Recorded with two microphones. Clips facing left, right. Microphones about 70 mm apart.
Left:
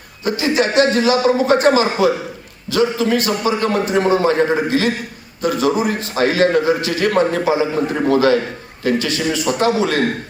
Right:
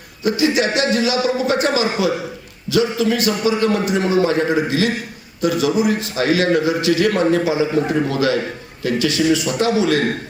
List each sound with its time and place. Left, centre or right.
0.3 s a man's voice: left